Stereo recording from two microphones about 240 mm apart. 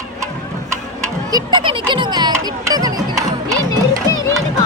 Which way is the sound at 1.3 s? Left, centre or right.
Centre.